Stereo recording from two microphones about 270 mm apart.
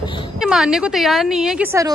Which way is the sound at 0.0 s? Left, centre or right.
Centre.